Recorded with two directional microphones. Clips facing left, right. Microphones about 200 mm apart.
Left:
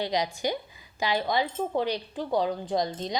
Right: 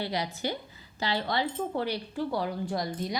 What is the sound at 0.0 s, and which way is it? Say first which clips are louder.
A woman's voice: left 4 dB; 15° left (ahead or behind).